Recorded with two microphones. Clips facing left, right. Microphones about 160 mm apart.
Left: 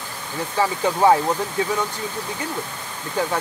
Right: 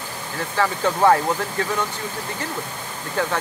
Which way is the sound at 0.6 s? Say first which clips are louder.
Even; 10° left (ahead or behind).